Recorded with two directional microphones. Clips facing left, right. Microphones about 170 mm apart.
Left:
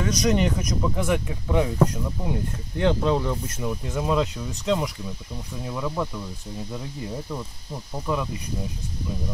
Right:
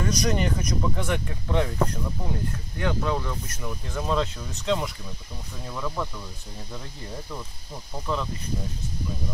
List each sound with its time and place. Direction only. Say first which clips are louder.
0.0 s speech: left 3 dB; centre (ahead or behind)
2.8 s speech: left 5 dB; 25° left (ahead or behind)
8.1 s speech: left 2 dB; 10° left (ahead or behind)